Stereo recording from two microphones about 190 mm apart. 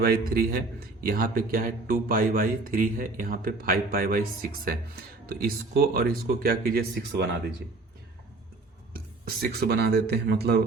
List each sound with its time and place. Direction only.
0.0 s speech: 55° right (ahead or behind)
5.2 s speech: 50° right (ahead or behind)
9.2 s speech: 55° right (ahead or behind)